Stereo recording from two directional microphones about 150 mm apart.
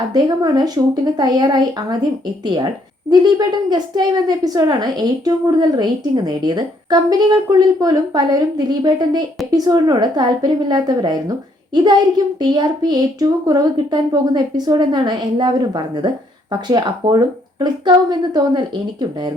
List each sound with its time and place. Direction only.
0.1 s a woman's voice: 30° right (ahead or behind)